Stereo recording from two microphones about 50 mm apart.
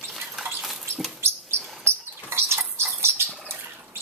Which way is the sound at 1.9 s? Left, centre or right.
Right.